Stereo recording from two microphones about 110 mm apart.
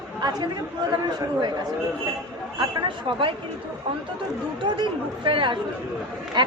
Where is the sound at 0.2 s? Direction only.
40° right (ahead or behind).